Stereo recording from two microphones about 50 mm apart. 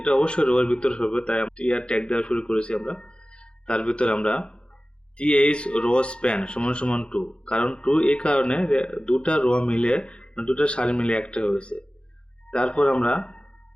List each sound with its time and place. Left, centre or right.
0.0 s speech: left